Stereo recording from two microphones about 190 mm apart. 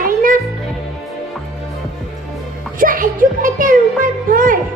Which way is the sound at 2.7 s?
45° right (ahead or behind).